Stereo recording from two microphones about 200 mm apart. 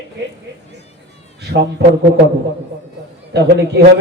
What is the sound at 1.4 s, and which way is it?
Speech, 55° right (ahead or behind).